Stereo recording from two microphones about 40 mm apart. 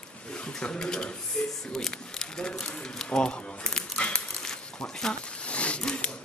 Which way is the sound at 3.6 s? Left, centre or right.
Centre.